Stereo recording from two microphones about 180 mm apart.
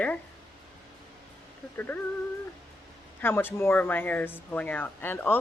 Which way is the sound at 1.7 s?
10° left (ahead or behind).